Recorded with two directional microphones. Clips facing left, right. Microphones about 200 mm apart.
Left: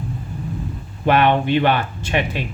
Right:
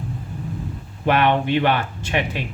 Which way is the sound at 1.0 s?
30° left (ahead or behind).